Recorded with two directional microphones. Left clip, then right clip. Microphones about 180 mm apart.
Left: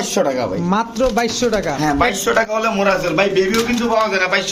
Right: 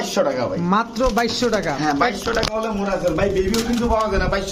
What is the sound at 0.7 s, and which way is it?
Speech, 5° left (ahead or behind).